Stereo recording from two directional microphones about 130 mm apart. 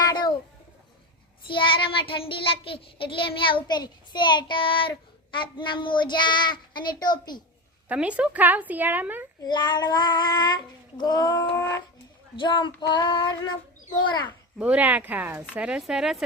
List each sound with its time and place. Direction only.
0.1 s a sound: 35° left (ahead or behind)
1.5 s child singing: 40° left (ahead or behind)
7.9 s a woman's voice: 10° right (ahead or behind)
9.4 s child singing: 35° left (ahead or behind)
12.4 s child singing: 40° left (ahead or behind)
14.6 s a woman's voice: 10° right (ahead or behind)